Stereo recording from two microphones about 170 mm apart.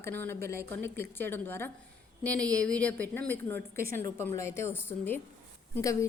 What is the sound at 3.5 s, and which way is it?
Speech, 60° right (ahead or behind).